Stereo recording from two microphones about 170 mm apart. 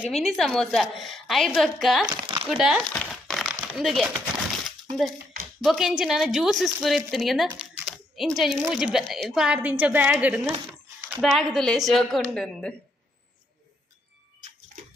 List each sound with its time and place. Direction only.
0.1 s a woman's voice: centre (ahead or behind)
2.0 s speech: 30° right (ahead or behind)
2.5 s a woman's voice: 5° right (ahead or behind)
3.2 s crumpling: centre (ahead or behind)
4.6 s a sound: centre (ahead or behind)
5.6 s a woman's voice: centre (ahead or behind)